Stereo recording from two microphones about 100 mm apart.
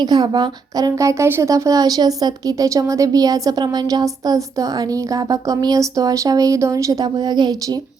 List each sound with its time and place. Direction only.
0.0 s a woman's voice: 45° right (ahead or behind)
7.0 s a woman's voice: 45° right (ahead or behind)